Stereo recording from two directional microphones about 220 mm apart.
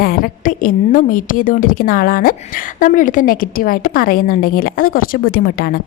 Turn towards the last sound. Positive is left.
turn(degrees=45)  # may be behind; listen again after turning